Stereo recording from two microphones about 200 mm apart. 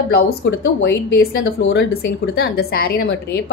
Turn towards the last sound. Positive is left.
turn(degrees=55)  # may be behind; listen again after turning